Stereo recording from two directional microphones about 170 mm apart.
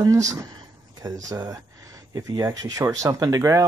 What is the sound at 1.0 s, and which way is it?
Speech, 20° right (ahead or behind).